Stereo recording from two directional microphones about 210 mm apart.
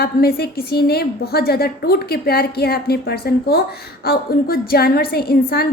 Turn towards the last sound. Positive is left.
turn(degrees=45)  # may be behind; listen again after turning